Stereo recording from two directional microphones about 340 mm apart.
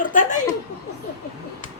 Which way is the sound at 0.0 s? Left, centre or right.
Left.